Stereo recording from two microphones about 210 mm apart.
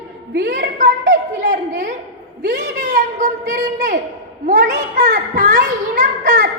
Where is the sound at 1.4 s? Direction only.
35° right (ahead or behind).